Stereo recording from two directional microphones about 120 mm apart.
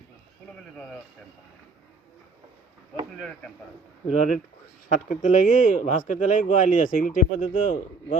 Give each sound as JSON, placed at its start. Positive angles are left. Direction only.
{"t": 3.2, "sound": "speech", "side_deg": 5}
{"t": 4.1, "sound": "speech", "side_deg": 90}